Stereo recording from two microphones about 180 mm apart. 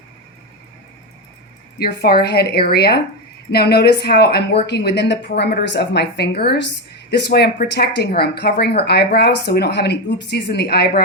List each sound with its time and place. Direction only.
1.8 s speech: 60° left (ahead or behind)